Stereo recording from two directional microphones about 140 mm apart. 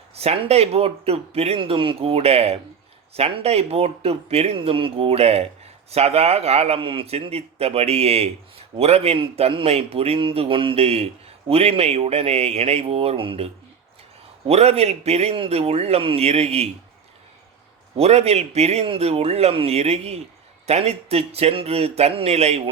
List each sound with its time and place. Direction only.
0.1 s speech: 45° right (ahead or behind)
17.9 s speech: 50° right (ahead or behind)